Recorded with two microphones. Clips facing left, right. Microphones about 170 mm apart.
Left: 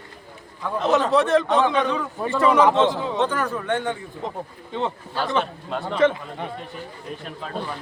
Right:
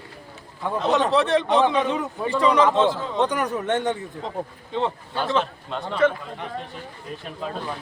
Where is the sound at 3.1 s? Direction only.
15° right (ahead or behind).